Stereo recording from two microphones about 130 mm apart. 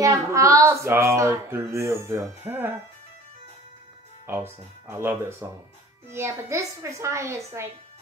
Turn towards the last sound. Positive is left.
turn(degrees=-20)  # may be behind; listen again after turning